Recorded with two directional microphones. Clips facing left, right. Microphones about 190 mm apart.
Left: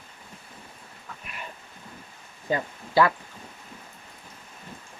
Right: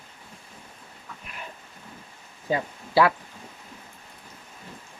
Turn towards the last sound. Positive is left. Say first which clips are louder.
# right 1 dB
turn(degrees=-5)  # may be behind; listen again after turning